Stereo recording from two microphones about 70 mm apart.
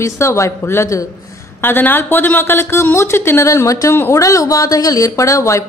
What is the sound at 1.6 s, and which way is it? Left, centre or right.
Speech, left.